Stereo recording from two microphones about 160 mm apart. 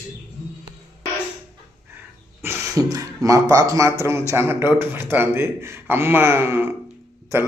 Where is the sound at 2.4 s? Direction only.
20° right (ahead or behind).